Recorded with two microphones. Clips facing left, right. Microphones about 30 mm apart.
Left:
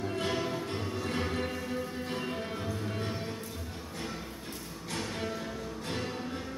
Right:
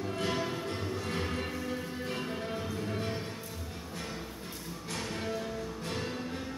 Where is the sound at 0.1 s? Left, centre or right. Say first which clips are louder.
Right 1 dB; centre.